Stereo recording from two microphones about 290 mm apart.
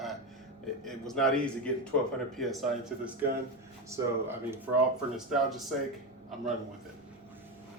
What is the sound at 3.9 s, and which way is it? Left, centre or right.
Speech, centre.